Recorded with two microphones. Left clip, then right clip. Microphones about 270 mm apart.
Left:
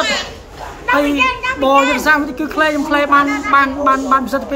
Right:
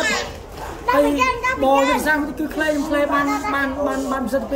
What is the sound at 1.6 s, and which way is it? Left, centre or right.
Speech, centre.